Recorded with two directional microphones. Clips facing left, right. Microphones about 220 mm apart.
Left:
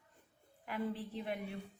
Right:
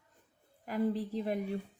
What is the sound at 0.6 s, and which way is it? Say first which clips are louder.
Speech: right 7 dB; 40° right (ahead or behind).